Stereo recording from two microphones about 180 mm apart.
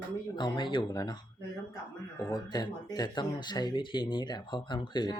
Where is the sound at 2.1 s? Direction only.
20° left (ahead or behind).